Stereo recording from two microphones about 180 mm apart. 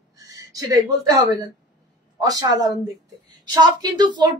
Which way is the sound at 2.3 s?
20° right (ahead or behind).